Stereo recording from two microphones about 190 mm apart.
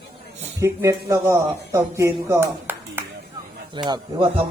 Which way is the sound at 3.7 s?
25° right (ahead or behind).